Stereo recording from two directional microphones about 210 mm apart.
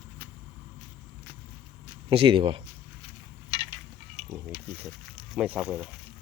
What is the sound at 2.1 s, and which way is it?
Speech, 25° right (ahead or behind).